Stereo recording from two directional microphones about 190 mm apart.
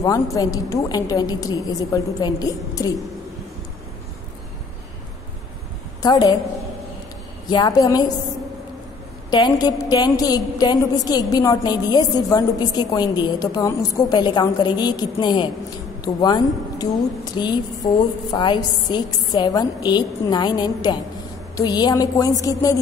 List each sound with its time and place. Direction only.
0.0 s a woman's voice: 20° left (ahead or behind)
6.0 s a woman's voice: 20° left (ahead or behind)
7.4 s a woman's voice: 20° left (ahead or behind)
9.3 s a woman's voice: 20° left (ahead or behind)